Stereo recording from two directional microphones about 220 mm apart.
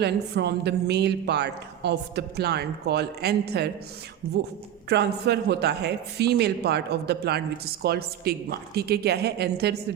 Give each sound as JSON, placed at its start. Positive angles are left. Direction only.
{"t": 0.0, "sound": "a man's voice", "side_deg": -50}
{"t": 4.9, "sound": "a man's voice", "side_deg": -50}